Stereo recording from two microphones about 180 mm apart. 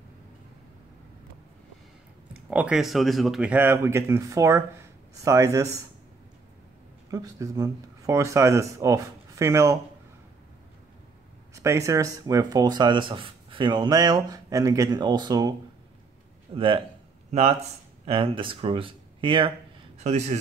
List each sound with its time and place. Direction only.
2.5 s speech: 5° right (ahead or behind)
7.1 s speech: 20° right (ahead or behind)
11.5 s speech: 15° right (ahead or behind)
16.5 s speech: 30° right (ahead or behind)
20.0 s speech: 40° right (ahead or behind)